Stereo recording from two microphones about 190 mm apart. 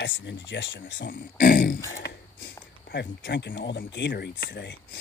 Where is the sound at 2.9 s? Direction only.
65° left (ahead or behind).